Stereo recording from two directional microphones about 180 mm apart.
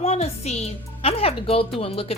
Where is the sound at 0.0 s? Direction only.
35° left (ahead or behind).